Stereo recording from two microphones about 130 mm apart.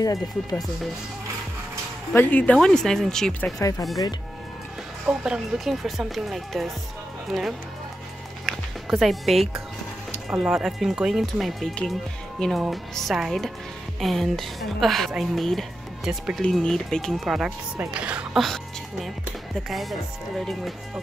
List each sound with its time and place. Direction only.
0.0 s speech: 30° left (ahead or behind)
2.1 s a woman's voice: 15° left (ahead or behind)
3.5 s speech: 25° left (ahead or behind)
5.0 s a woman's voice: 5° right (ahead or behind)
19.7 s a woman's voice: centre (ahead or behind)